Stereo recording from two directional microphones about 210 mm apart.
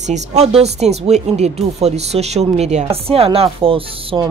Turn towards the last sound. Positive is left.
turn(degrees=-25)  # may be behind; listen again after turning